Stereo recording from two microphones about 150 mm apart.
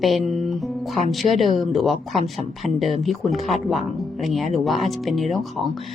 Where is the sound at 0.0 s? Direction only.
Centre (ahead or behind).